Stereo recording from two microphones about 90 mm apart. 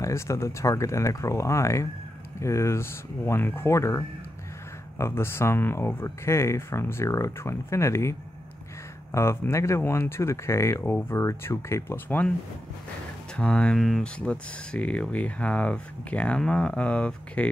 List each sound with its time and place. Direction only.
0.0 s speech: 35° left (ahead or behind)
10.8 s speech: 20° left (ahead or behind)
13.4 s speech: 10° left (ahead or behind)